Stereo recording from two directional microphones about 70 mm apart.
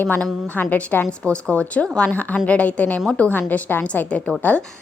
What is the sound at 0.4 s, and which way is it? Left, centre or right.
A woman's voice, left.